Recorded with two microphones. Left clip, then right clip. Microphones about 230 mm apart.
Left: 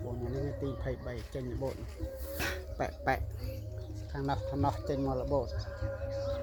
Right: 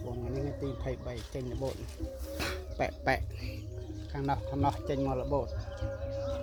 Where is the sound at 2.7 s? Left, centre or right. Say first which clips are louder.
Right 3 dB; right.